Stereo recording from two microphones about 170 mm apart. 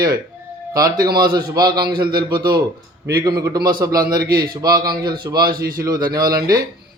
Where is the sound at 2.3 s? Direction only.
25° right (ahead or behind).